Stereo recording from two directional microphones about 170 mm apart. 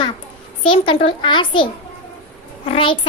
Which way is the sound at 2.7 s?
30° left (ahead or behind).